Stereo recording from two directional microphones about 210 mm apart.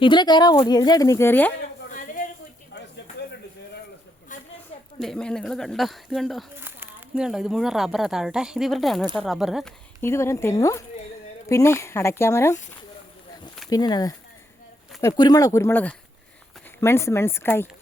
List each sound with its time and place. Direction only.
0.0 s speech: 20° left (ahead or behind)
1.9 s a sound: 40° left (ahead or behind)
4.9 s speech: 5° left (ahead or behind)
6.6 s speech: 10° right (ahead or behind)
10.0 s speech: 10° left (ahead or behind)
13.7 s speech: 20° left (ahead or behind)